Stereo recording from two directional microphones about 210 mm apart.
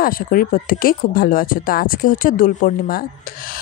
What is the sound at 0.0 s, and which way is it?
Speech, 45° left (ahead or behind).